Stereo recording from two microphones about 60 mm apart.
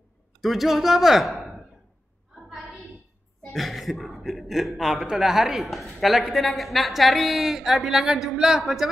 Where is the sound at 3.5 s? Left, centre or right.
Centre.